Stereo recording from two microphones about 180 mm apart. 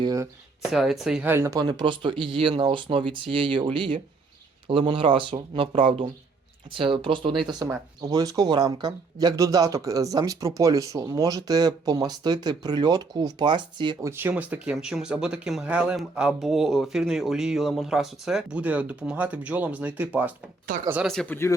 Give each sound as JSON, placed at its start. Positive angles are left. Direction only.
{"t": 0.0, "sound": "speech", "side_deg": -20}
{"t": 0.6, "sound": "speech", "side_deg": 0}
{"t": 14.1, "sound": "speech", "side_deg": -10}
{"t": 21.1, "sound": "speech", "side_deg": 5}